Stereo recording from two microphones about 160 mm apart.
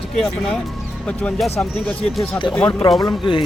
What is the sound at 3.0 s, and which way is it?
Speech, 30° left (ahead or behind).